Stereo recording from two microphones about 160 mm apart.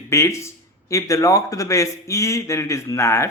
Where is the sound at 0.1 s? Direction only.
15° left (ahead or behind).